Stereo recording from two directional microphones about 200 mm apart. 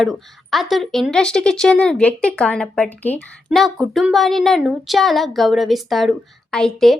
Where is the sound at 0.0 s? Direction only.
Centre (ahead or behind).